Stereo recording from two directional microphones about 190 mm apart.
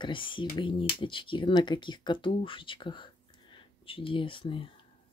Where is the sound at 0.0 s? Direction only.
25° left (ahead or behind).